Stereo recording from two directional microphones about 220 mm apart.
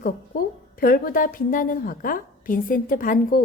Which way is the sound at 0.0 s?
40° left (ahead or behind).